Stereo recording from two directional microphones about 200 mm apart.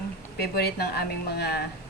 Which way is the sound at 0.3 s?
50° left (ahead or behind).